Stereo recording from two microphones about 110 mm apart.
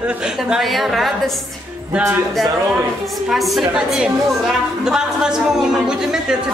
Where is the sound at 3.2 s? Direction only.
Centre (ahead or behind).